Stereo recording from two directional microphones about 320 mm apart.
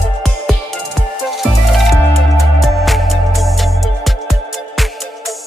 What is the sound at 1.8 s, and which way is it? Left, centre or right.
Music, centre.